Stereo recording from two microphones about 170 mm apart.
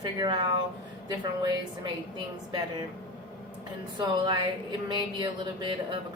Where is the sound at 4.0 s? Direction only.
25° right (ahead or behind).